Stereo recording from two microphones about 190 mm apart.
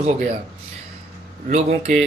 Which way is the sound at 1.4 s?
35° right (ahead or behind).